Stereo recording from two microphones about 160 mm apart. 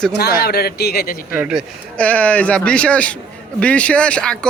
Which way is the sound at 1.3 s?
5° right (ahead or behind).